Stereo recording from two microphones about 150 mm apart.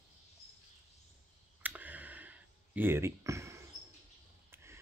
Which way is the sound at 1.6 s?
10° right (ahead or behind).